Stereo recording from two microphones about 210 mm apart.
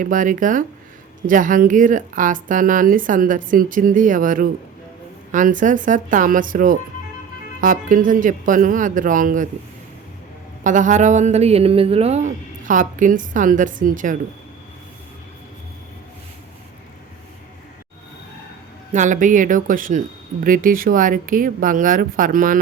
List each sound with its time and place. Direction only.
0.0 s a woman's voice: 40° right (ahead or behind)
10.6 s a woman's voice: 35° right (ahead or behind)
18.9 s a woman's voice: 35° right (ahead or behind)